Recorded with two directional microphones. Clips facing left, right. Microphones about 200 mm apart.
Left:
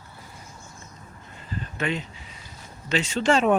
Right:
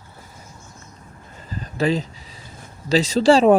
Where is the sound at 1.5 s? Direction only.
35° right (ahead or behind).